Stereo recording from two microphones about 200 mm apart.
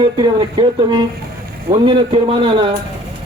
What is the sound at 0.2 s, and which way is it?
A man's voice, 25° right (ahead or behind).